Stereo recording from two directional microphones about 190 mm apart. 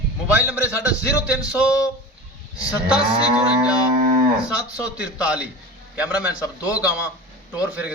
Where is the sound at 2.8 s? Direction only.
5° right (ahead or behind).